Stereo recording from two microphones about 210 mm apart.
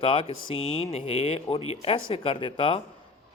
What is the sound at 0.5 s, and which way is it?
Speech, 70° left (ahead or behind).